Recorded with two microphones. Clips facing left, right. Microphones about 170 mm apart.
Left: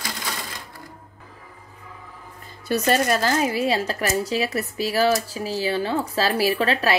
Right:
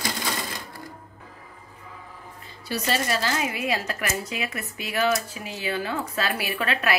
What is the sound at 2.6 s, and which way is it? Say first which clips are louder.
Speech: left 6 dB; 50° left (ahead or behind).